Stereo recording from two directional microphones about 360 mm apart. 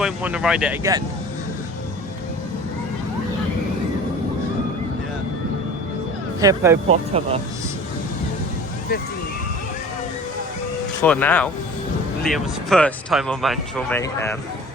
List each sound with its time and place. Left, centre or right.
0.0 s speech: centre
6.4 s speech: centre
11.0 s speech: centre